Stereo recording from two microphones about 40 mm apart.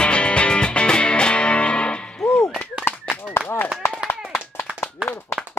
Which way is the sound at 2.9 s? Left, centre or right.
Left.